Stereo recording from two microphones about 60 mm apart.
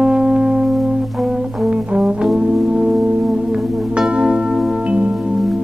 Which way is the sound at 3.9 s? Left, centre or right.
Centre.